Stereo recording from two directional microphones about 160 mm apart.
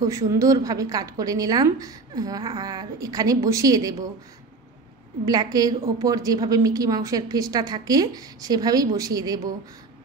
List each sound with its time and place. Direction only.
0.0 s a woman's voice: 20° right (ahead or behind)
5.2 s a woman's voice: 25° right (ahead or behind)